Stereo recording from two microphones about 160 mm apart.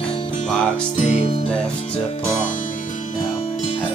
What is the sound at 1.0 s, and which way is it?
Music, 45° left (ahead or behind).